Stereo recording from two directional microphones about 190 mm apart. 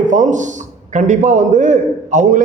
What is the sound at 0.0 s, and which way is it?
A man's voice, 40° right (ahead or behind).